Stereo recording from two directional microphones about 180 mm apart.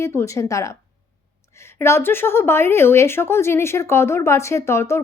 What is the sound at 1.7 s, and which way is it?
A woman's voice, 15° left (ahead or behind).